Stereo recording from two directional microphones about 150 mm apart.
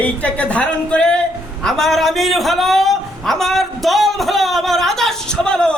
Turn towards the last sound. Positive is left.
turn(degrees=5)  # may be behind; listen again after turning